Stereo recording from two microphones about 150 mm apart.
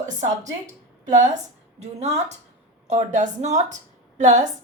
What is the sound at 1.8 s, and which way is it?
A woman's voice, 45° right (ahead or behind).